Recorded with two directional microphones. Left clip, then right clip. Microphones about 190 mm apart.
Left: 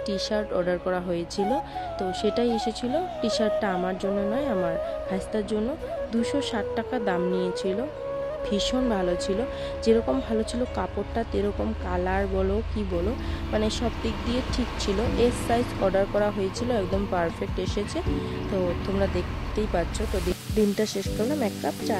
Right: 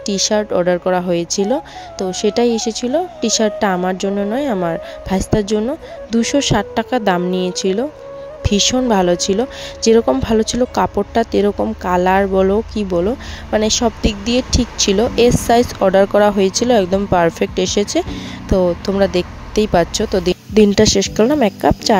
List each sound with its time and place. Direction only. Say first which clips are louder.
0.0 s speech: right 10 dB; 40° right (ahead or behind)